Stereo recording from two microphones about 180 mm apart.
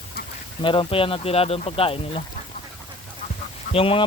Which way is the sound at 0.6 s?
30° left (ahead or behind).